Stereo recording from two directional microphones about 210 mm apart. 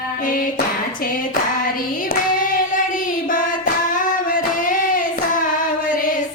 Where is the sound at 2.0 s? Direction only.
40° left (ahead or behind).